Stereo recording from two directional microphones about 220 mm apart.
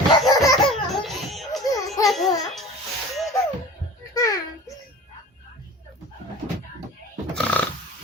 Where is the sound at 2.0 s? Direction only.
Centre (ahead or behind).